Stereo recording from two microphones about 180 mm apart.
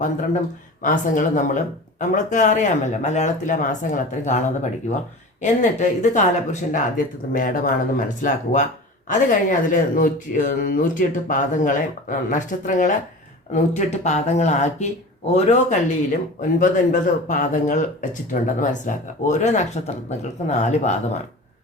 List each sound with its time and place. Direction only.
0.8 s speech: 45° left (ahead or behind)